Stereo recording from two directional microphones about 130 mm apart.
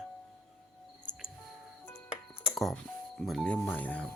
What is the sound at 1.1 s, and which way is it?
Music, 65° left (ahead or behind).